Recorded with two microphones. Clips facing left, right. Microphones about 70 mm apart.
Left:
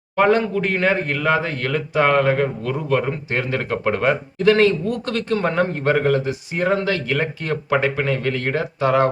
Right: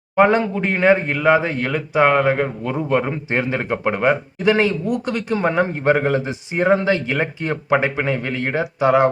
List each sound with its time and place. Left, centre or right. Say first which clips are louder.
0.2 s a man's voice: right 1 dB; centre